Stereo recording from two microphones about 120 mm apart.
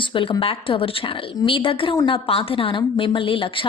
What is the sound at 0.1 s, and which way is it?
A woman's voice, 45° left (ahead or behind).